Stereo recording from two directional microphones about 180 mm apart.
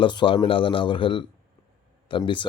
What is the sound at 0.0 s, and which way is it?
Speech, 25° left (ahead or behind).